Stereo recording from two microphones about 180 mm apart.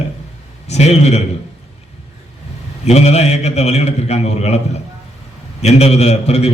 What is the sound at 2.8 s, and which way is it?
A man's voice, 35° left (ahead or behind).